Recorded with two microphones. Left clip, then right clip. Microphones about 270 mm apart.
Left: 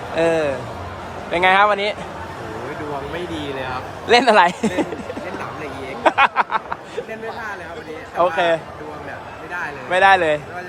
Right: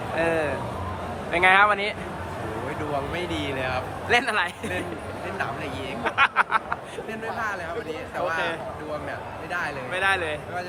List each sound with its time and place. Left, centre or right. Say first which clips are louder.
0.2 s a man's voice: left 7 dB; centre
3.6 s a man's voice: left 1 dB; centre
6.1 s a man's voice: left 6 dB; centre
9.9 s speech: left 12 dB; left